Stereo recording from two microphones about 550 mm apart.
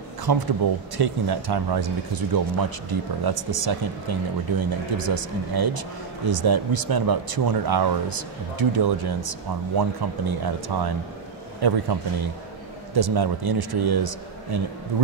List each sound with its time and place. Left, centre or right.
0.3 s speech: right
12.9 s speech: right